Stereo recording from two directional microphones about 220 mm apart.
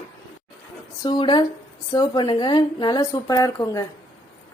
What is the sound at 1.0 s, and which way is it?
Speech, 20° left (ahead or behind).